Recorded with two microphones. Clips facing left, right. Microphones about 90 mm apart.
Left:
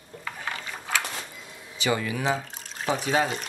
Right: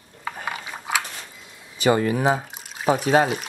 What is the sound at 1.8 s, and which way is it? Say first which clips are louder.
Speech: right 7 dB; 40° right (ahead or behind).